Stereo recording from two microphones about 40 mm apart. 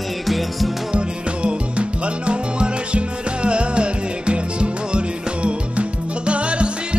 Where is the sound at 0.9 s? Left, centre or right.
Right.